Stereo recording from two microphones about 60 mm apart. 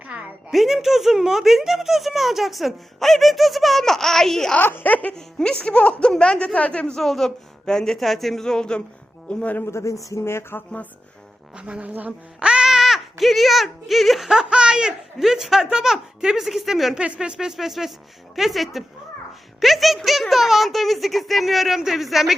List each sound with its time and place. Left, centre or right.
0.0 s a sound: right
0.5 s speech: centre
4.6 s speech: left
5.1 s speech: centre
6.9 s speech: centre
9.3 s speech: left
9.6 s a man's voice: left
10.2 s speech: left
11.5 s speech: centre
15.2 s speech: centre
17.2 s speech: centre